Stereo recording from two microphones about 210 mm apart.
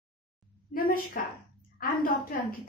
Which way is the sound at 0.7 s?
45° left (ahead or behind).